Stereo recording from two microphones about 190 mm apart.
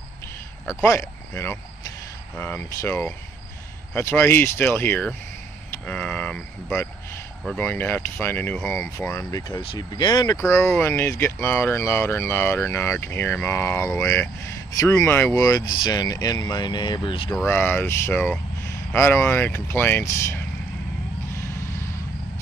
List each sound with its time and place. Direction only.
0.8 s speech: 15° left (ahead or behind)
9.6 s speech: 25° left (ahead or behind)
17.5 s speech: 10° left (ahead or behind)
21.4 s basketball bounce: 15° left (ahead or behind)